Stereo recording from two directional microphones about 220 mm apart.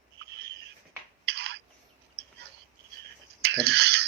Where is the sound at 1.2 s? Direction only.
50° right (ahead or behind).